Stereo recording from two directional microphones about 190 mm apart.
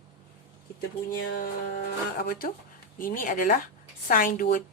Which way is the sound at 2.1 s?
50° left (ahead or behind).